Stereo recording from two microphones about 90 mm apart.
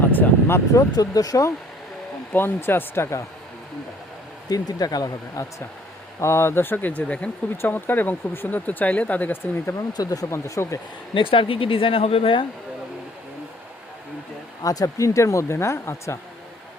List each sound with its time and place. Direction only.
0.1 s speech: 25° left (ahead or behind); by 1.5 s 40° left (ahead or behind)
2.3 s speech: 25° left (ahead or behind)
4.4 s speech: 45° left (ahead or behind); by 9.7 s 20° left (ahead or behind)
9.7 s speech: 45° left (ahead or behind)
11.1 s speech: 75° left (ahead or behind)
14.6 s speech: 40° left (ahead or behind)